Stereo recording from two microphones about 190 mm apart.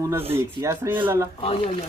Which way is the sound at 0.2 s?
30° right (ahead or behind).